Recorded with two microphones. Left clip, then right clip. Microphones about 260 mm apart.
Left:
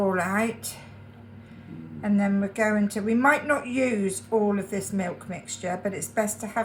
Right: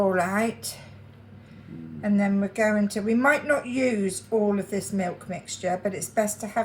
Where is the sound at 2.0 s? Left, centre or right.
Centre.